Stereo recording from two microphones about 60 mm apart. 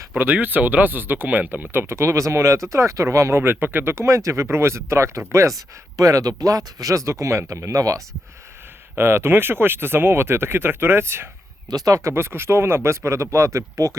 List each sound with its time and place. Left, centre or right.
0.2 s speech: right
3.4 s speech: right
3.9 s speech: right
4.4 s speech: right
5.5 s speech: right
9.0 s speech: right
11.7 s speech: right
12.1 s speech: right